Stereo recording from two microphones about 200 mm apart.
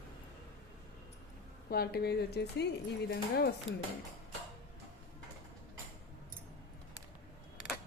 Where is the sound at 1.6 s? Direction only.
50° left (ahead or behind).